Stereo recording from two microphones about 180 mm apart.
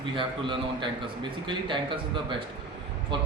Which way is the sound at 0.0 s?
25° right (ahead or behind).